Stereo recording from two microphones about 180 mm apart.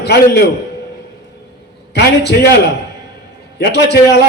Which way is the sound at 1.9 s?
65° left (ahead or behind).